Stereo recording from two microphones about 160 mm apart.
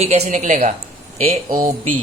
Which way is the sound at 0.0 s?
45° right (ahead or behind).